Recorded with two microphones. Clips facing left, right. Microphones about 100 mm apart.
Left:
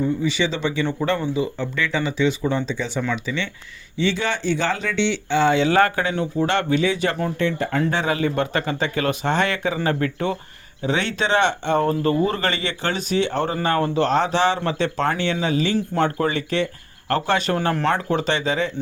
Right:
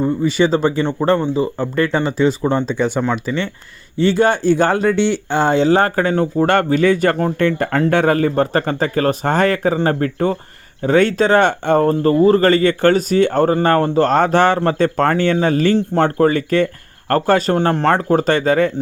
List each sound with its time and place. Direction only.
0.0 s speech: 45° right (ahead or behind)
3.0 s speech: 40° right (ahead or behind)
15.7 s speech: 40° right (ahead or behind)